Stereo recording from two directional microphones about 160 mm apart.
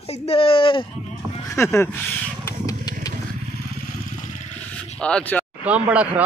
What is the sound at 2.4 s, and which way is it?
Motorcycle, 20° left (ahead or behind).